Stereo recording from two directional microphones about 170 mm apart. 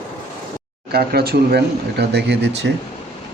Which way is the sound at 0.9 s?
70° right (ahead or behind).